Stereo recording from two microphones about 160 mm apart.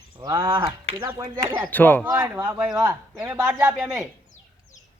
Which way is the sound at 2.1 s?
10° right (ahead or behind).